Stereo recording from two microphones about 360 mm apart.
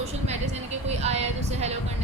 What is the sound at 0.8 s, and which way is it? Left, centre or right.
Speech, centre.